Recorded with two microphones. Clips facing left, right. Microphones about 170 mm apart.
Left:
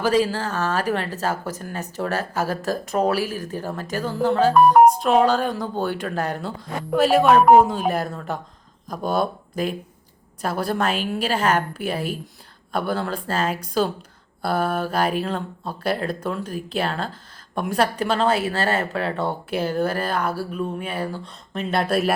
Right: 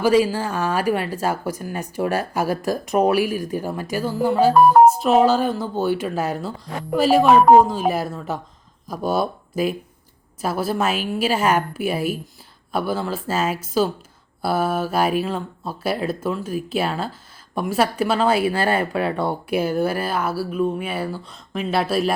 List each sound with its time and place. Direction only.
0.0 s speech: 10° right (ahead or behind)